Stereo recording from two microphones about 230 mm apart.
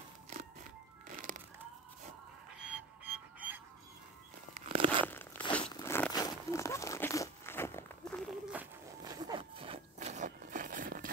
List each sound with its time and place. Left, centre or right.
1.0 s music: right
2.6 s music: centre
4.6 s a sound: right
5.0 s a sound: centre
5.6 s crumpling: centre
9.0 s zipper: centre; by 11.1 s right